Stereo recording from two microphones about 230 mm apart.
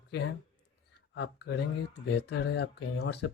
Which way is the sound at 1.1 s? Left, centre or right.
Left.